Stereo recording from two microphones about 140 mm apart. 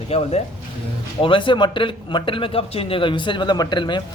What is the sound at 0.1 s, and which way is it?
A man's voice, 45° left (ahead or behind).